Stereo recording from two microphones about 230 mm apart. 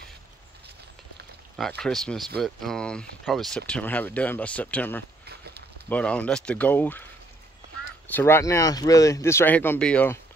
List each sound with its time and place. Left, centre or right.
1.6 s speech: centre
5.2 s a sound: right
5.9 s speech: centre
8.1 s speech: centre